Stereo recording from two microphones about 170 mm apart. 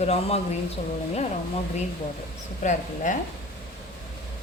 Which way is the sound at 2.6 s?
50° left (ahead or behind).